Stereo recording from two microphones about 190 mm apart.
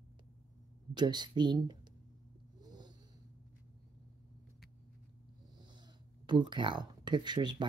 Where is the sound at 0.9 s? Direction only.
25° right (ahead or behind).